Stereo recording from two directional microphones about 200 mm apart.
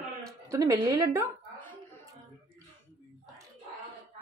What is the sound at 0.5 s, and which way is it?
Speech, 15° right (ahead or behind).